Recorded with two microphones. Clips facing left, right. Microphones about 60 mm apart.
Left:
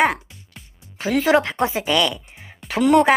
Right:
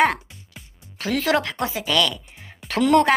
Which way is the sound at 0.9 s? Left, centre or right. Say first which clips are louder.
Left 4 dB; centre.